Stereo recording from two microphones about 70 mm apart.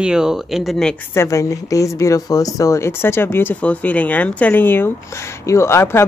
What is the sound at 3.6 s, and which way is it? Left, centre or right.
Speech, left.